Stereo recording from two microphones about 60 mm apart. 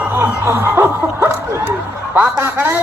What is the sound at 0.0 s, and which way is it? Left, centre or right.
Snicker, right.